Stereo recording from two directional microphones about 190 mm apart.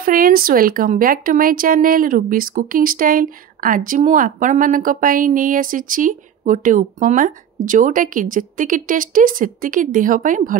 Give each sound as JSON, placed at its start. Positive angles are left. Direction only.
{"t": 0.0, "sound": "speech", "side_deg": -50}